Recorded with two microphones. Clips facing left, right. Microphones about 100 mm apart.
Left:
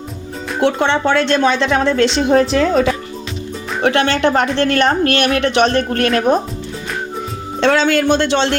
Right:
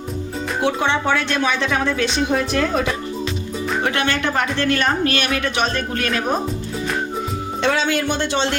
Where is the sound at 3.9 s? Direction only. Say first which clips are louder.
Left 6 dB; 30° left (ahead or behind).